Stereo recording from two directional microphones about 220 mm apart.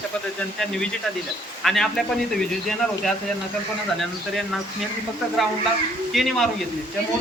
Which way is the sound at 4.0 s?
Centre (ahead or behind).